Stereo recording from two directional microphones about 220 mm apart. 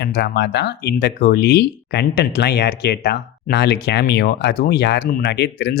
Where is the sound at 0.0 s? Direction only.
50° left (ahead or behind).